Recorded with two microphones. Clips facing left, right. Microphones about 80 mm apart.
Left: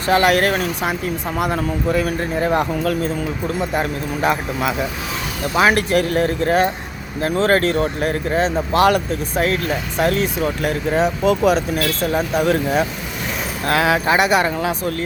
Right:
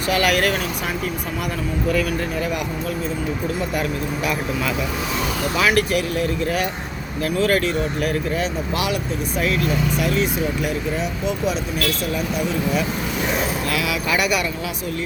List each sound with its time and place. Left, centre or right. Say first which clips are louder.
0.1 s speech: left 4 dB; left
3.8 s speech: left 2 dB; left
10.0 s speech: left 3 dB; left
11.3 s speech: left 7 dB; left
13.7 s speech: left 6 dB; left
14.4 s speech: left 6 dB; left